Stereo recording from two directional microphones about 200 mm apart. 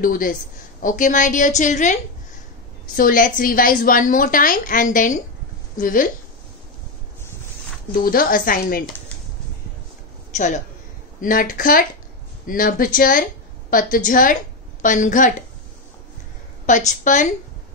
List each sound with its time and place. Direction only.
0.0 s a woman's voice: 45° left (ahead or behind)
3.0 s a woman's voice: 45° left (ahead or behind)
8.0 s a woman's voice: 45° left (ahead or behind)
10.3 s a woman's voice: 40° left (ahead or behind)
16.6 s a woman's voice: 40° left (ahead or behind)